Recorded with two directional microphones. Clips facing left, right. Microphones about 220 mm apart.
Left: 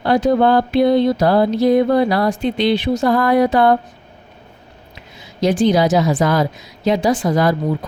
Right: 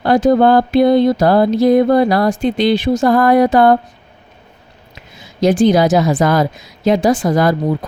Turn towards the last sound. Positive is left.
turn(degrees=-50)  # may be behind; listen again after turning